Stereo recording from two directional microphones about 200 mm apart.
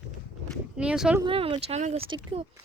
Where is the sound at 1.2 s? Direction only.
25° right (ahead or behind).